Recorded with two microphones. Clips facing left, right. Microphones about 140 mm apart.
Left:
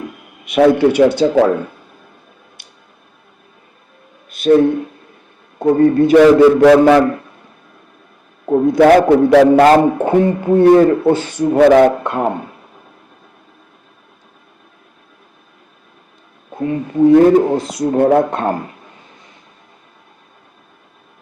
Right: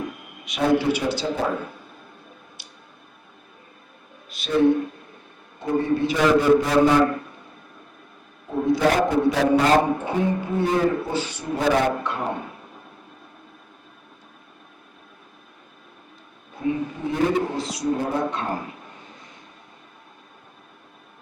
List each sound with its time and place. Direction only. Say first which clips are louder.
0.4 s a man's voice: left 10 dB; 60° left (ahead or behind); by 1.5 s 75° left (ahead or behind)
2.6 s a sound: left 1 dB; 55° left (ahead or behind)
4.3 s a sound: left 12 dB; 55° left (ahead or behind)
5.6 s a man's voice: left 11 dB; 55° left (ahead or behind)
6.4 s a man's voice: left 10 dB; 90° left
8.4 s a man's voice: left 11 dB; 60° left (ahead or behind)
11.5 s a man's voice: left 12 dB; 80° left
12.0 s speech: left 10 dB; 55° left (ahead or behind)
16.6 s a man's voice: left 10 dB; 55° left (ahead or behind)